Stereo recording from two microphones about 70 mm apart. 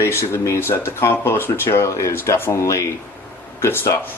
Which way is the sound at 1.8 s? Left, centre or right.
Left.